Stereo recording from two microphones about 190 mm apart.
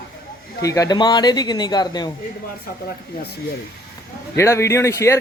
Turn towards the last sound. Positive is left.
turn(degrees=15)  # may be behind; listen again after turning